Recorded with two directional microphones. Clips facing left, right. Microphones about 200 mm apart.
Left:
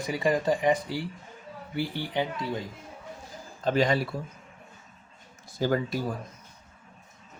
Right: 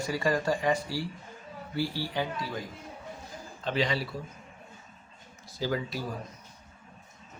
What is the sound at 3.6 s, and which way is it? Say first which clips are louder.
Speech: left 5 dB; 45° left (ahead or behind).